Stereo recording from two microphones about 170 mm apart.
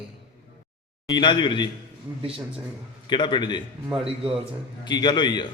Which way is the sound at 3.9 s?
30° right (ahead or behind).